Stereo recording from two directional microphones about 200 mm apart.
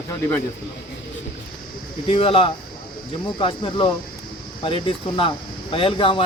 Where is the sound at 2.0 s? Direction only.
25° left (ahead or behind).